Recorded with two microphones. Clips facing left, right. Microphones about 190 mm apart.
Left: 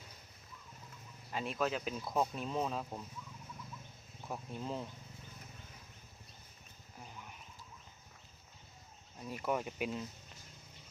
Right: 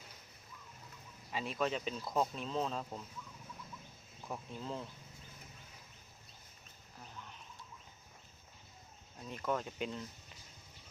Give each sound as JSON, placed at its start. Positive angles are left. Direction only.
{"t": 1.3, "sound": "speech", "side_deg": 0}
{"t": 4.3, "sound": "speech", "side_deg": 0}
{"t": 4.6, "sound": "speech", "side_deg": 15}
{"t": 7.0, "sound": "sheep", "side_deg": 10}
{"t": 9.2, "sound": "speech", "side_deg": 10}